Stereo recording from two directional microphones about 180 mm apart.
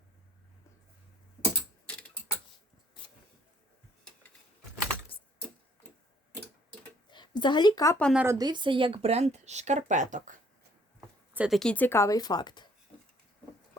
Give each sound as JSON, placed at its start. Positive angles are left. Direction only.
{"t": 1.9, "sound": "tick-tock", "side_deg": 5}
{"t": 7.1, "sound": "speech", "side_deg": 25}
{"t": 8.1, "sound": "a woman's voice", "side_deg": -10}
{"t": 8.4, "sound": "speech", "side_deg": -25}
{"t": 11.3, "sound": "speech", "side_deg": 0}